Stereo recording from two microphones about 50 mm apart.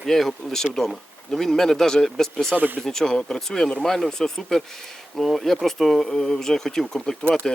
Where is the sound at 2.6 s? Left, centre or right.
Right.